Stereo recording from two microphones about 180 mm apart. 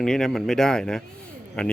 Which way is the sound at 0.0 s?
5° left (ahead or behind).